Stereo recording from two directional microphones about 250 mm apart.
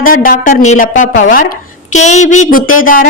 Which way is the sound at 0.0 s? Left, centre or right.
Left.